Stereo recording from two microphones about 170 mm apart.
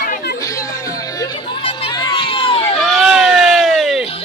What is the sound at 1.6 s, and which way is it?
Crowd, 35° left (ahead or behind).